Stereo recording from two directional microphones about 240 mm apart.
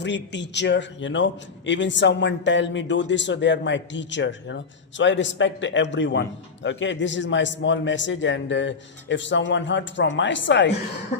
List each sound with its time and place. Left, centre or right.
0.0 s a man's voice: left